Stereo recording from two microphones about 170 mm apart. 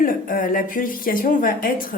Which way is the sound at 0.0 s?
55° left (ahead or behind).